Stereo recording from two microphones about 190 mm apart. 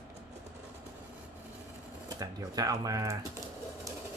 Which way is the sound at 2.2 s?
20° right (ahead or behind).